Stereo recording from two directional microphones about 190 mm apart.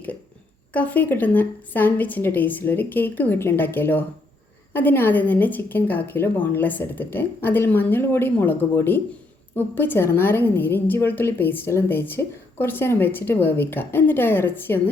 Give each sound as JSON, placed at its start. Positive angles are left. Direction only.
{"t": 0.7, "sound": "a woman's voice", "side_deg": 10}